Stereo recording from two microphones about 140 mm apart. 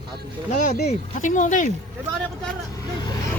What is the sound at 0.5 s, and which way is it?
Speech, 65° left (ahead or behind).